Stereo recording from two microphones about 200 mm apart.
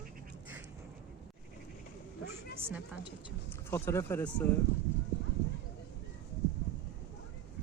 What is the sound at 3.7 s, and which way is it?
Speech, 15° left (ahead or behind).